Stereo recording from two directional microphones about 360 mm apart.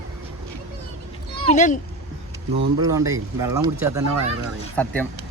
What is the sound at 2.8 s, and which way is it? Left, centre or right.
Speech, centre.